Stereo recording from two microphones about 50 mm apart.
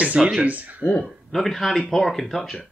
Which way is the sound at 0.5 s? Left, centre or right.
Right.